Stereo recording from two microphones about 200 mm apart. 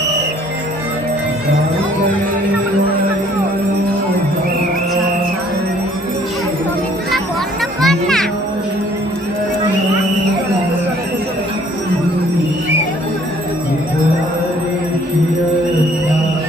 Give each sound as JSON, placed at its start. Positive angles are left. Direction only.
{"t": 7.8, "sound": "music", "side_deg": 0}